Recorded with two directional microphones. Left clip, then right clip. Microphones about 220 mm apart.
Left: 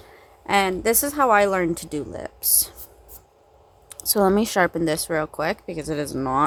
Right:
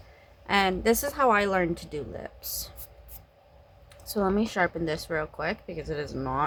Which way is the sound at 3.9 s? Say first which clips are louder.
Left 8 dB; 45° left (ahead or behind).